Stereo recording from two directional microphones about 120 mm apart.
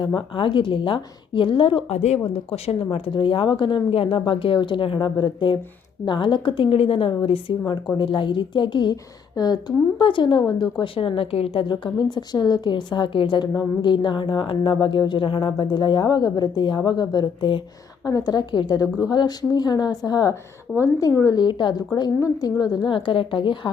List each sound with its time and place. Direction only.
0.0 s a woman's voice: 45° left (ahead or behind)
2.0 s speech: 65° left (ahead or behind)
2.3 s a woman's voice: 50° left (ahead or behind)
11.7 s a woman's voice: 40° left (ahead or behind)
21.4 s speech: 40° left (ahead or behind)
22.9 s a woman's voice: 45° left (ahead or behind)